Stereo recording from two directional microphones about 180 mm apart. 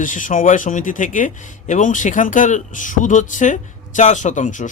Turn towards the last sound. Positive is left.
turn(degrees=45)  # may be behind; listen again after turning